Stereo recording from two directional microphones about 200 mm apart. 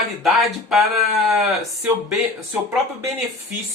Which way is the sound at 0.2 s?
Centre (ahead or behind).